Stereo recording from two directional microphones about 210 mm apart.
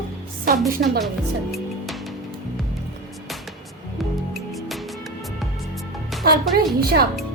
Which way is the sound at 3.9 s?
Centre (ahead or behind).